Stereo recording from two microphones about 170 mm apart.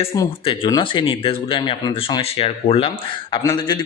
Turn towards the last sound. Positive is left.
turn(degrees=25)  # may be behind; listen again after turning